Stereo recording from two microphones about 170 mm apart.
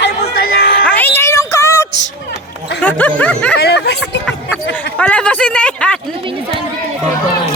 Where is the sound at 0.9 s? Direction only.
10° left (ahead or behind).